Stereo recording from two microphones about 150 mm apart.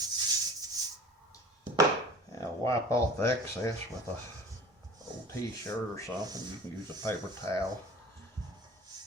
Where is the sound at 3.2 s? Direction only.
20° left (ahead or behind).